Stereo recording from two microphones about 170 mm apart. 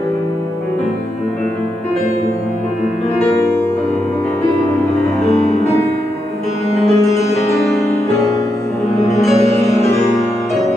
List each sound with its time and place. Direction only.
5.5 s music: 40° left (ahead or behind)
6.8 s music: centre (ahead or behind)
7.2 s music: 40° left (ahead or behind)
9.1 s music: centre (ahead or behind)